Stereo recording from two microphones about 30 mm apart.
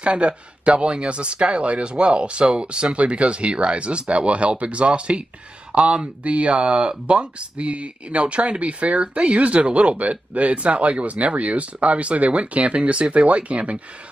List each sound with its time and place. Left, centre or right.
0.0 s speech: right